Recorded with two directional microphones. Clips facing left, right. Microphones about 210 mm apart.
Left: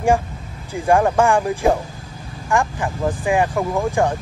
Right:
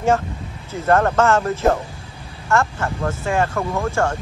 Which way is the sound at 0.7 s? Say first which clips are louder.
Left 1 dB; 15° left (ahead or behind).